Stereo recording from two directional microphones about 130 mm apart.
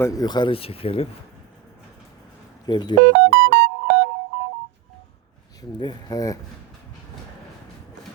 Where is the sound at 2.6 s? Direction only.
35° left (ahead or behind).